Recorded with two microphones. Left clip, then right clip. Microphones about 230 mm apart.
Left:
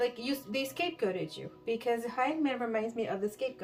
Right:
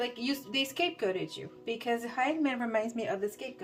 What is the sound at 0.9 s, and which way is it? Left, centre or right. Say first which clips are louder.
A woman's voice: right 1 dB; right.